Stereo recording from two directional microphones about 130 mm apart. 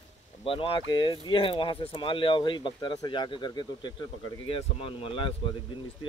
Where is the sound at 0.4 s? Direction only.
45° left (ahead or behind).